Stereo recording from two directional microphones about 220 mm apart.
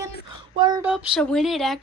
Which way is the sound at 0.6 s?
20° right (ahead or behind).